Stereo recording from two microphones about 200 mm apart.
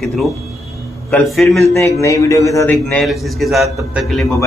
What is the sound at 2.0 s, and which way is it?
A man's voice, 15° left (ahead or behind).